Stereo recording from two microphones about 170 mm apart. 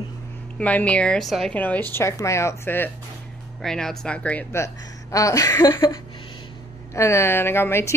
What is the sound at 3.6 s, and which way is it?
A woman's voice, 5° left (ahead or behind).